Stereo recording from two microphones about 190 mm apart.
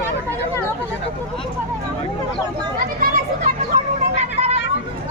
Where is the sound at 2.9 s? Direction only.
50° right (ahead or behind).